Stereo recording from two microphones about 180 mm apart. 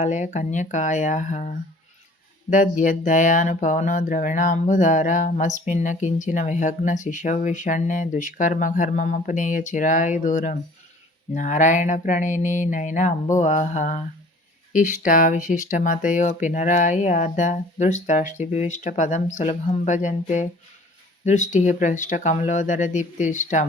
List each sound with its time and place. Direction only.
0.0 s speech: 40° left (ahead or behind)
13.3 s mantra: 40° left (ahead or behind)
14.7 s speech: 45° left (ahead or behind)